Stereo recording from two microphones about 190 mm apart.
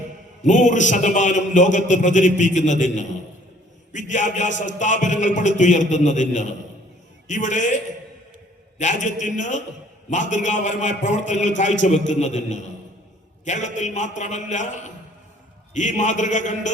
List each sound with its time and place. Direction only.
0.4 s a man's voice: 40° left (ahead or behind)
8.8 s a man's voice: 40° left (ahead or behind)